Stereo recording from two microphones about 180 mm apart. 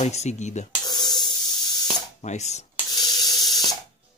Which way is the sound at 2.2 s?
40° left (ahead or behind).